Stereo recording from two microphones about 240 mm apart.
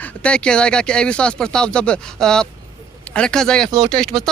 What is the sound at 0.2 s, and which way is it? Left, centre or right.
Speech, centre.